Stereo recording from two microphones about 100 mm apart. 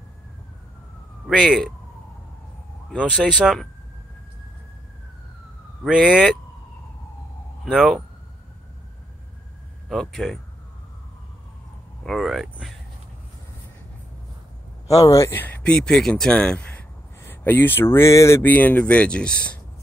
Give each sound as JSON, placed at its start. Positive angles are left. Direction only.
{"t": 1.2, "sound": "speech", "side_deg": -5}
{"t": 3.0, "sound": "speech", "side_deg": -5}
{"t": 5.9, "sound": "speech", "side_deg": -10}
{"t": 7.6, "sound": "speech", "side_deg": -5}
{"t": 9.8, "sound": "speech", "side_deg": 0}
{"t": 12.0, "sound": "speech", "side_deg": 0}
{"t": 14.9, "sound": "speech", "side_deg": 35}
{"t": 15.7, "sound": "speech", "side_deg": 5}